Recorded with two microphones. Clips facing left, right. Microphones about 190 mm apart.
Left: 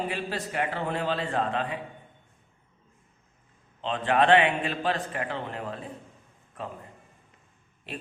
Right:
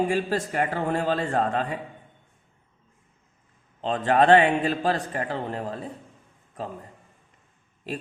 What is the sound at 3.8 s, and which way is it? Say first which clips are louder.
A man's voice: right 3 dB; 40° right (ahead or behind).